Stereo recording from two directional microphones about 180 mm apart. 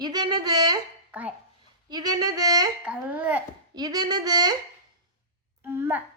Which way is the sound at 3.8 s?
20° right (ahead or behind).